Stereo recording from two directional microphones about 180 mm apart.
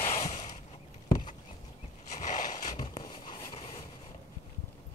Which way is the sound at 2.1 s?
45° left (ahead or behind).